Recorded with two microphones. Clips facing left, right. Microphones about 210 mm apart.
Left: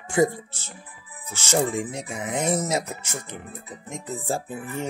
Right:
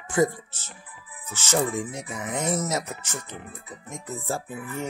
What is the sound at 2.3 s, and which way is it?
Speech, 15° left (ahead or behind).